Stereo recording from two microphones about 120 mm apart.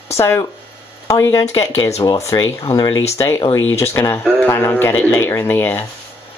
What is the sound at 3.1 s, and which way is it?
Speech, 25° left (ahead or behind).